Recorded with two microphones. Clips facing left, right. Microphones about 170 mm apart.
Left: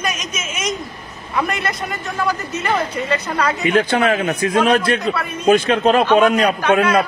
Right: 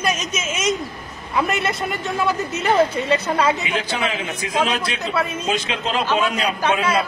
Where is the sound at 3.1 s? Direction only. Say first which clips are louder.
Right 1 dB; 25° right (ahead or behind).